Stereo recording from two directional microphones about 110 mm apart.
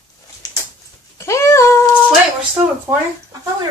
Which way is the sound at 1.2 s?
25° left (ahead or behind).